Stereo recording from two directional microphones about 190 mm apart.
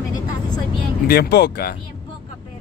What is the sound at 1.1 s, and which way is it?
Speech, 55° left (ahead or behind).